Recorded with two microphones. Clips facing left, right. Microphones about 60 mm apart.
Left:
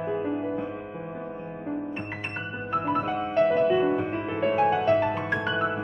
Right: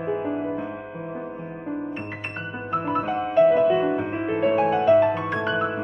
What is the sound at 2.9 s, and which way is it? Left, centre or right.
Music, centre.